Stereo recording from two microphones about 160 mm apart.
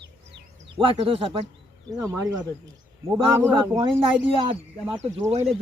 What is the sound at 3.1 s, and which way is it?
Speech, 15° right (ahead or behind).